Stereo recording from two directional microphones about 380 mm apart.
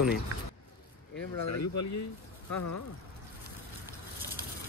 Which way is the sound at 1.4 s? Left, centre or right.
Left.